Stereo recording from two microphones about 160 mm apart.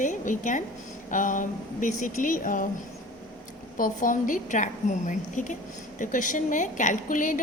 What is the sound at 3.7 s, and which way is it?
A woman's voice, 55° left (ahead or behind).